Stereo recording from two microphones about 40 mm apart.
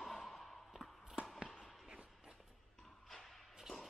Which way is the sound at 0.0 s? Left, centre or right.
Centre.